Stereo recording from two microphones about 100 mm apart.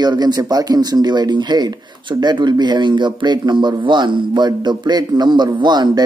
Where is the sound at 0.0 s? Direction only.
45° right (ahead or behind).